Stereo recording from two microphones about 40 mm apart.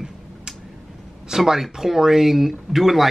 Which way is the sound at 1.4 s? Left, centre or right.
Centre.